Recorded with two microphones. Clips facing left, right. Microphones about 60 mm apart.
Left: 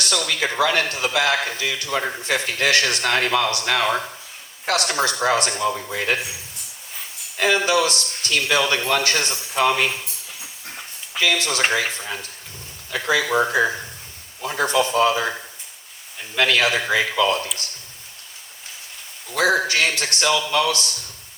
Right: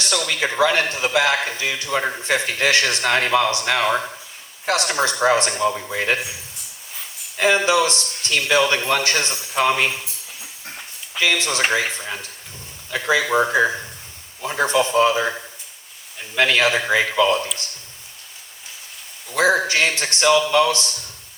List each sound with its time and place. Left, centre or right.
0.0 s a man's voice: right
7.3 s a man's voice: right
11.2 s a man's voice: right
16.4 s a man's voice: right
19.3 s a man's voice: right